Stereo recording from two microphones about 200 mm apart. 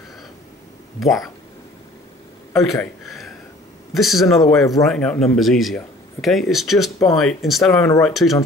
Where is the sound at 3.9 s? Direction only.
Centre (ahead or behind).